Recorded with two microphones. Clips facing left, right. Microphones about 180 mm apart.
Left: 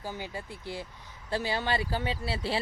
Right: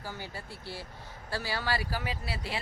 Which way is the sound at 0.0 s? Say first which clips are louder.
Left 4 dB; 15° left (ahead or behind).